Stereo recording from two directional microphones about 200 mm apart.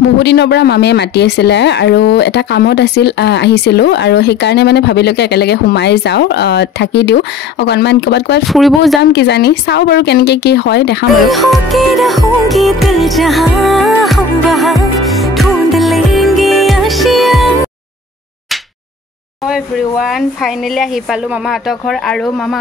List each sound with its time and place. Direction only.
0.2 s speech: 60° left (ahead or behind)
8.5 s music: centre (ahead or behind)
9.0 s speech: 55° left (ahead or behind)
11.2 s music: centre (ahead or behind)
19.4 s music: centre (ahead or behind)